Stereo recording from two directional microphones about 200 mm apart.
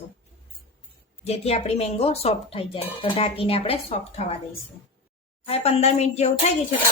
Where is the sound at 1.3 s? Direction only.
30° left (ahead or behind).